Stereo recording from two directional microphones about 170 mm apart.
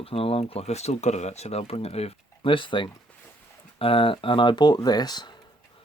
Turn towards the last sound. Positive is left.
turn(degrees=25)  # may be behind; listen again after turning